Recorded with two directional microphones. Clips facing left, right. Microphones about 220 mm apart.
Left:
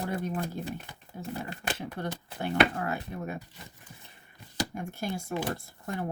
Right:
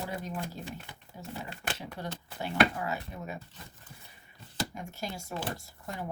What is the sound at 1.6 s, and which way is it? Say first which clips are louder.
Speech: left 4 dB; 55° left (ahead or behind).